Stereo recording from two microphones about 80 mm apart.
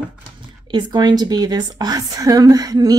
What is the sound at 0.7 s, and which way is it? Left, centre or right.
A woman's voice, right.